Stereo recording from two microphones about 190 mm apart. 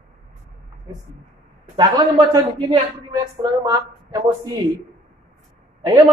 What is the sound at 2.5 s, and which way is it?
Speech, 30° right (ahead or behind).